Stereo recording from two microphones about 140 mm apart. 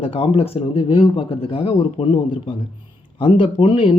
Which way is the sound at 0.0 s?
40° left (ahead or behind).